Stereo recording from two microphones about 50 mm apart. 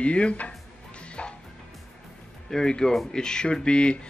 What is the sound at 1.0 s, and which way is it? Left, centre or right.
Music, left.